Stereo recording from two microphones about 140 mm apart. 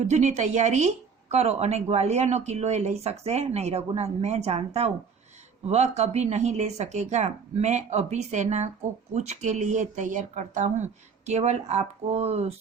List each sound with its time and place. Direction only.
0.0 s a woman's voice: 55° right (ahead or behind)